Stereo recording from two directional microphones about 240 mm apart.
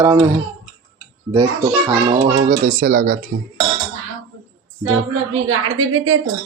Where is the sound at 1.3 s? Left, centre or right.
Centre.